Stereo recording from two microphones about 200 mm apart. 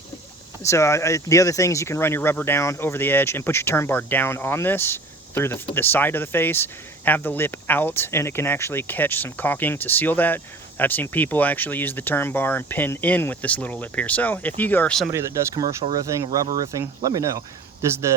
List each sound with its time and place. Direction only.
0.6 s speech: 15° left (ahead or behind)
15.1 s speech: 15° right (ahead or behind)